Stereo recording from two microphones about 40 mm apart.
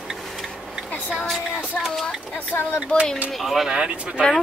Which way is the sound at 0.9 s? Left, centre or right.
Left.